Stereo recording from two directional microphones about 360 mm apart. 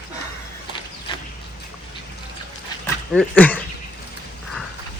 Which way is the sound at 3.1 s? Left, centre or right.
Centre.